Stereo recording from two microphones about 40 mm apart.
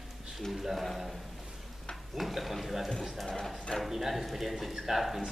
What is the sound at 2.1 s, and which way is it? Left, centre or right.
A man's voice, centre.